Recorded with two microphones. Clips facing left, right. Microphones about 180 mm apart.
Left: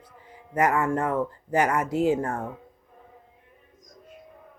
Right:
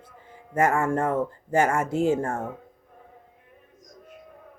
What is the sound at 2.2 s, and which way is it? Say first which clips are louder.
Speech: right 1 dB; 50° right (ahead or behind).